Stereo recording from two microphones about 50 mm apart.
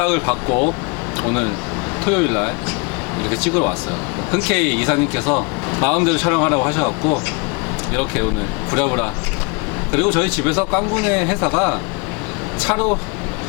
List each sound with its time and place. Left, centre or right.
0.0 s a man's voice: centre